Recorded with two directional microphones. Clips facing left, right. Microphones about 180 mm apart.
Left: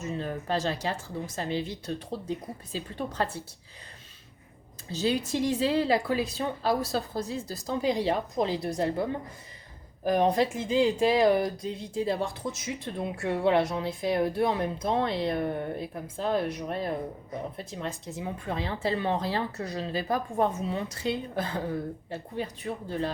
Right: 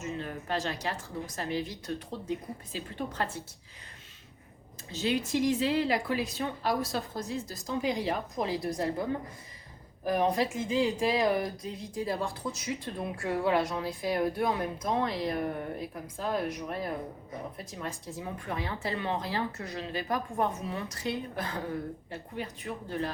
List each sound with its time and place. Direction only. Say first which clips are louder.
0.0 s speech: left 3 dB; 35° left (ahead or behind)
4.9 s speech: left 2 dB; 35° left (ahead or behind)
11.9 s speech: left 3 dB; 20° left (ahead or behind)